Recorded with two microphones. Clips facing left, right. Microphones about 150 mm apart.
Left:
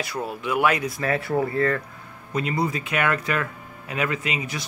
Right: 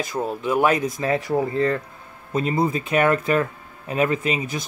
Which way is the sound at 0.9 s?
20° right (ahead or behind).